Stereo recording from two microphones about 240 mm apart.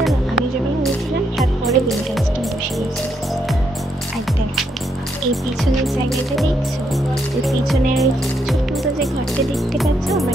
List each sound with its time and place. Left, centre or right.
0.0 s music: centre
7.4 s speech: centre
9.8 s speech: centre